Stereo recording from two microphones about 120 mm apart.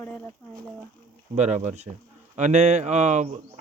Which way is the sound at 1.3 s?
80° right.